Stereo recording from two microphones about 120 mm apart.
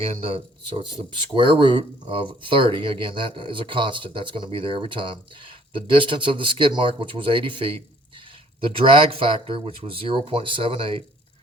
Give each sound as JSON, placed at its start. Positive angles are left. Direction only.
{"t": 0.0, "sound": "speech", "side_deg": -55}
{"t": 1.3, "sound": "speech", "side_deg": -45}